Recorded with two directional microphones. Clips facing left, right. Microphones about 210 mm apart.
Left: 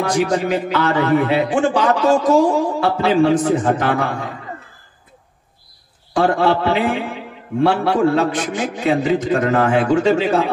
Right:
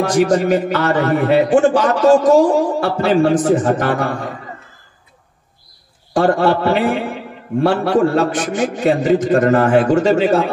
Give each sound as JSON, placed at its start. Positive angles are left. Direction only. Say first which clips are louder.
{"t": 0.0, "sound": "a man's voice", "louder": "right 4 dB", "side_deg": -45}
{"t": 6.1, "sound": "a man's voice", "louder": "right 2 dB", "side_deg": -45}